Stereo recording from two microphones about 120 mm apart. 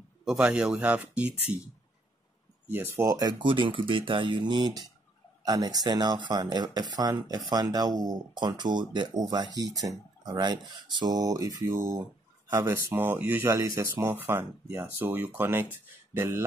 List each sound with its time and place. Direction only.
0.2 s speech: 5° right (ahead or behind)
3.0 s speech: 30° right (ahead or behind)
14.0 s speech: 15° right (ahead or behind)